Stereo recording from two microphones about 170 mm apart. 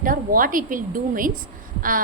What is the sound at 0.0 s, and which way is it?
A woman's voice, 55° right (ahead or behind).